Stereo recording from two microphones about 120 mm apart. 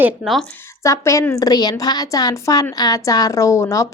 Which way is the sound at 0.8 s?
25° left (ahead or behind).